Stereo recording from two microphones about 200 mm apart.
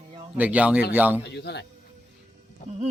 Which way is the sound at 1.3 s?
55° left (ahead or behind).